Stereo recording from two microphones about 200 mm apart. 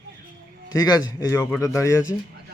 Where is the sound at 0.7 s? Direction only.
20° left (ahead or behind).